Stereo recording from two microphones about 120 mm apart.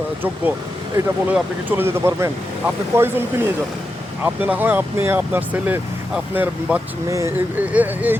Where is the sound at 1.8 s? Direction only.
20° right (ahead or behind).